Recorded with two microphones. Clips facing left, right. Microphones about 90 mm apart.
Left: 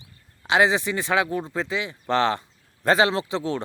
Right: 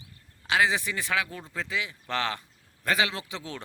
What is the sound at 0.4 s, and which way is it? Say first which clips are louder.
Speech: left 5 dB; 25° left (ahead or behind).